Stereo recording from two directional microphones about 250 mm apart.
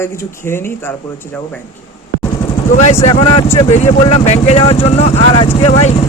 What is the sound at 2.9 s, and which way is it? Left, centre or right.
Speech, centre.